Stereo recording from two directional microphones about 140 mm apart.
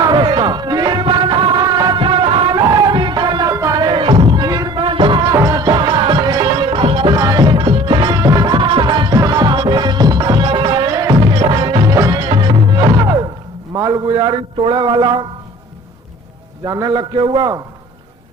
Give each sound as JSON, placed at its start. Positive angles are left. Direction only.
{"t": 0.0, "sound": "music", "side_deg": -35}
{"t": 13.7, "sound": "a sound", "side_deg": -25}
{"t": 16.6, "sound": "a man's voice", "side_deg": -30}